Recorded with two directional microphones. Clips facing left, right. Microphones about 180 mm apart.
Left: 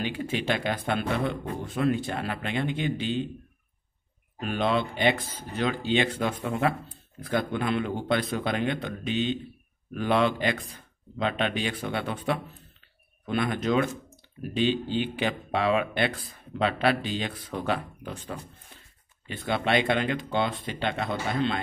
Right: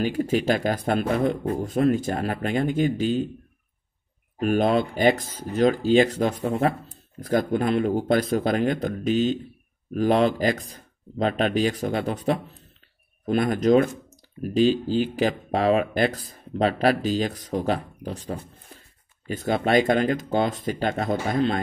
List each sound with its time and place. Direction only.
0.0 s speech: 40° right (ahead or behind)
4.4 s speech: 45° right (ahead or behind)